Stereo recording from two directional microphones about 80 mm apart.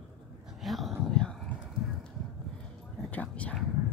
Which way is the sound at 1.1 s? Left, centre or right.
Centre.